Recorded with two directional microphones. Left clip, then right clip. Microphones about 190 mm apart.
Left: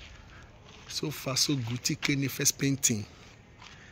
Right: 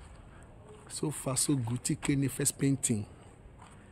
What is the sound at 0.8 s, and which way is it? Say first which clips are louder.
Speech: left 2 dB; 20° right (ahead or behind).